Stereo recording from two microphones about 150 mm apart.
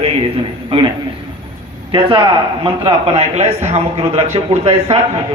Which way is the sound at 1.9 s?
30° right (ahead or behind).